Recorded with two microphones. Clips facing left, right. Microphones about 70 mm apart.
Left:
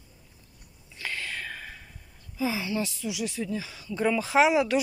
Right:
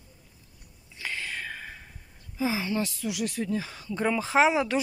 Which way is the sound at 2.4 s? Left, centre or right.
Right.